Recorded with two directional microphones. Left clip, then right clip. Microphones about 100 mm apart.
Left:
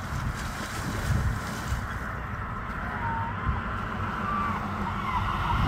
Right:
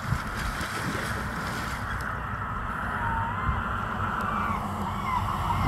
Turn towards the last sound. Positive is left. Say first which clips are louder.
# even
turn(degrees=-10)  # may be behind; listen again after turning